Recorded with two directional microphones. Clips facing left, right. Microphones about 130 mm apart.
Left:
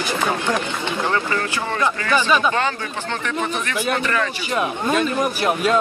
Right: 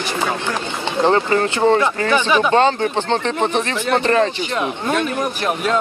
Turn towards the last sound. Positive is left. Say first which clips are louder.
# left 1 dB
turn(degrees=5)  # may be behind; listen again after turning